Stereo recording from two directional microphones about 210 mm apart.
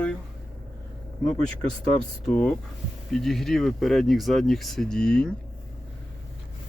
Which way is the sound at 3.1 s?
Centre (ahead or behind).